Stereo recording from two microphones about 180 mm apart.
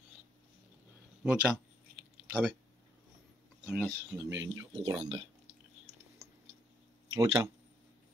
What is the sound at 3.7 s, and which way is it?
Speech, 5° left (ahead or behind).